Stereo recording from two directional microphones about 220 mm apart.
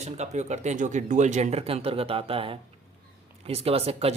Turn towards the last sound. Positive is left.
turn(degrees=-25)  # may be behind; listen again after turning